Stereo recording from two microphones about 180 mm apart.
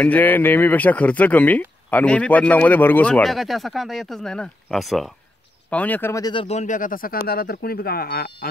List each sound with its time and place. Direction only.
0.0 s speech: 10° left (ahead or behind)
6.4 s speech: 40° left (ahead or behind); by 8.5 s 55° left (ahead or behind)